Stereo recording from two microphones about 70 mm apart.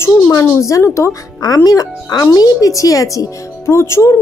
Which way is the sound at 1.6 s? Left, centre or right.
Left.